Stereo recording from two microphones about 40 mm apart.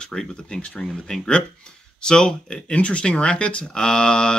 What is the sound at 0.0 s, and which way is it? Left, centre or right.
Speech, centre.